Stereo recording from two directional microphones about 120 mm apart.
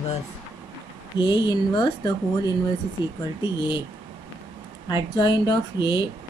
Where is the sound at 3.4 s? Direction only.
40° left (ahead or behind).